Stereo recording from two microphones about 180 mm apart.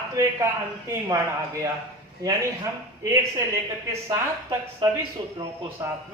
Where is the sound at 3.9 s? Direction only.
15° right (ahead or behind).